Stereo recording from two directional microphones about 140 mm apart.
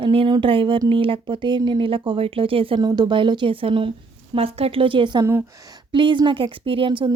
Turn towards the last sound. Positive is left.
turn(degrees=-35)  # may be behind; listen again after turning